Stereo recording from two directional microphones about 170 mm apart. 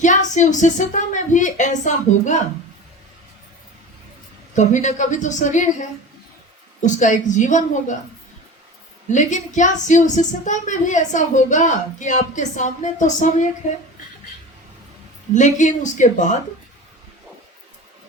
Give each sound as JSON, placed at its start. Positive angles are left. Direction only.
{"t": 0.0, "sound": "speech", "side_deg": 45}
{"t": 4.5, "sound": "speech", "side_deg": 45}
{"t": 6.8, "sound": "speech", "side_deg": 45}
{"t": 9.1, "sound": "speech", "side_deg": 45}
{"t": 15.3, "sound": "speech", "side_deg": 45}